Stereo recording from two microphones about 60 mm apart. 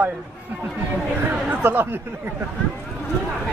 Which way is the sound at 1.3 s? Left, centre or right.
Right.